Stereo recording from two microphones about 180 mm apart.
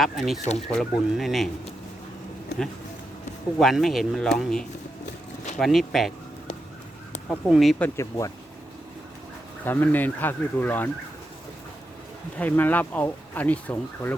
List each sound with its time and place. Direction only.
0.0 s speech: centre (ahead or behind)
3.6 s speech: centre (ahead or behind)
7.3 s speech: centre (ahead or behind)
7.9 s speech: 20° left (ahead or behind)
9.6 s speech: 10° left (ahead or behind)
12.4 s speech: 10° left (ahead or behind)